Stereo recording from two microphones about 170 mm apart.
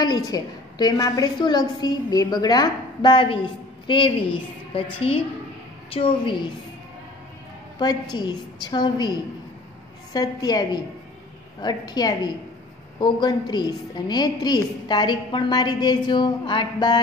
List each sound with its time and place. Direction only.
0.0 s a woman's voice: 20° left (ahead or behind)
7.8 s a woman's voice: 25° left (ahead or behind)